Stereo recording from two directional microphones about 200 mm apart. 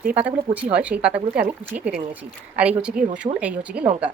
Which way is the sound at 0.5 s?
5° right (ahead or behind).